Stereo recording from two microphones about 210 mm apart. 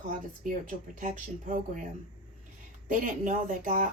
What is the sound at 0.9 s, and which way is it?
Speech, 40° right (ahead or behind).